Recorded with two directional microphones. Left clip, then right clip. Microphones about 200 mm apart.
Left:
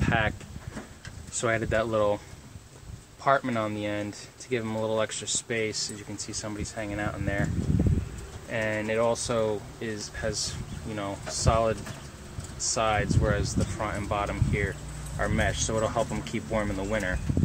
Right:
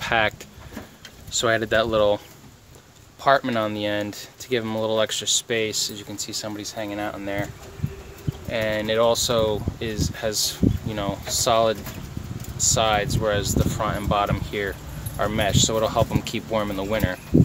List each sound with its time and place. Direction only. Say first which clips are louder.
0.0 s vehicle: right 6 dB; 30° right (ahead or behind)
1.4 s speech: right 6 dB; 20° right (ahead or behind)
3.3 s speech: right 5 dB; 30° right (ahead or behind)
6.4 s speech: right 4 dB; 10° right (ahead or behind)
8.5 s speech: right 5 dB; 20° right (ahead or behind)
12.7 s speech: right 4 dB; 25° right (ahead or behind)